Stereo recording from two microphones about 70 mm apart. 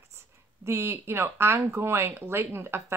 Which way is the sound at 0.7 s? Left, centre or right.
Right.